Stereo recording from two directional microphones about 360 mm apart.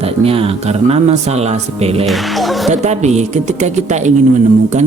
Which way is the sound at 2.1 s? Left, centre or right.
Centre.